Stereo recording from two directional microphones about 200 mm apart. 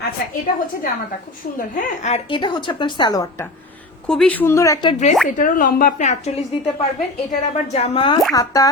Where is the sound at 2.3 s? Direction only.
25° left (ahead or behind).